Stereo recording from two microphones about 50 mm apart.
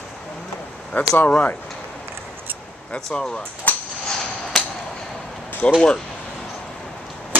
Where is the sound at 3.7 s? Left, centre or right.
Left.